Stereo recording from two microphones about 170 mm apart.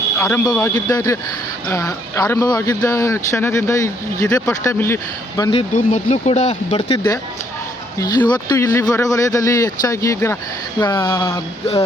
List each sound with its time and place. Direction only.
0.2 s speech: 10° left (ahead or behind)
5.4 s speech: 30° left (ahead or behind)
5.7 s speech: 40° left (ahead or behind)
6.9 s speech: 20° left (ahead or behind)
11.1 s speech: 15° left (ahead or behind)